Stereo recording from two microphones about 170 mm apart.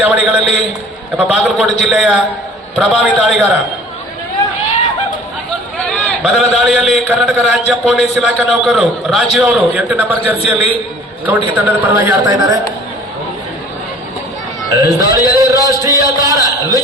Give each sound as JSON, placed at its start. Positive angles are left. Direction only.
{"t": 0.0, "sound": "a woman's voice", "side_deg": -5}
{"t": 5.7, "sound": "a man's voice", "side_deg": 5}
{"t": 14.7, "sound": "a man's voice", "side_deg": -20}